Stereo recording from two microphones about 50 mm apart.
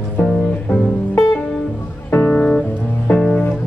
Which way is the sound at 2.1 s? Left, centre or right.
Left.